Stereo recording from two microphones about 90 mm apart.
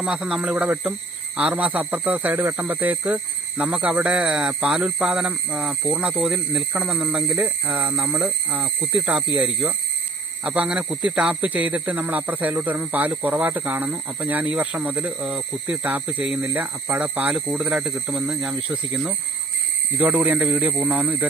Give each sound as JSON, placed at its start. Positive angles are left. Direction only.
{"t": 0.0, "sound": "speech", "side_deg": -10}
{"t": 7.3, "sound": "speech", "side_deg": -20}
{"t": 8.6, "sound": "speech", "side_deg": -5}